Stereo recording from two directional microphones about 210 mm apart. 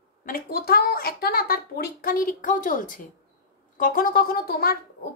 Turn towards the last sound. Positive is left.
turn(degrees=45)  # may be behind; listen again after turning